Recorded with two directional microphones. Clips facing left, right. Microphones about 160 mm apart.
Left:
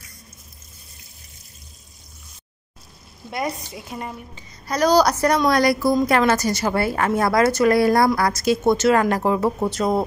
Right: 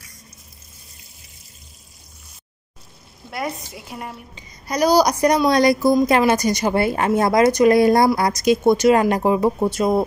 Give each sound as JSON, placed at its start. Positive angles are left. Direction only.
{"t": 3.3, "sound": "a woman's voice", "side_deg": 0}